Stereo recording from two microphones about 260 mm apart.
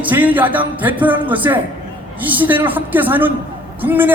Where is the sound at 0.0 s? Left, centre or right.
Centre.